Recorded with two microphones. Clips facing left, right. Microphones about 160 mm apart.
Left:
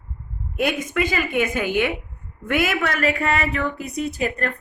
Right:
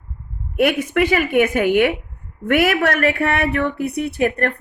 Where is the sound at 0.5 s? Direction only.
65° right (ahead or behind).